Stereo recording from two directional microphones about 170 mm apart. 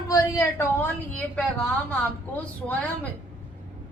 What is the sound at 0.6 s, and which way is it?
Speech, 10° left (ahead or behind).